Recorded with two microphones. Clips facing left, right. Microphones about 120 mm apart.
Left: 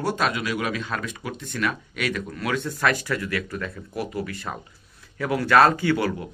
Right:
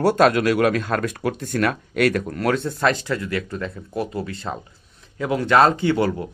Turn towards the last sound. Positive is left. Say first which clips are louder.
# right 3 dB
turn(degrees=-25)  # may be behind; listen again after turning